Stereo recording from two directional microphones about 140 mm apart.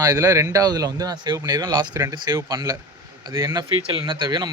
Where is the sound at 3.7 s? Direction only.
40° right (ahead or behind).